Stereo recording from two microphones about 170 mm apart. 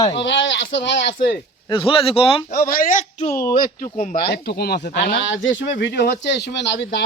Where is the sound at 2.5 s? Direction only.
55° left (ahead or behind).